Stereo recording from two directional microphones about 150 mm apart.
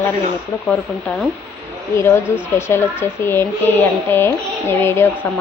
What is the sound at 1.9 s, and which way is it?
Speech, 20° left (ahead or behind).